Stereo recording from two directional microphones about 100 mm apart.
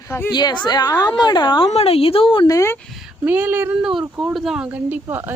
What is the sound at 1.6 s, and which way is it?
Speech, 85° left.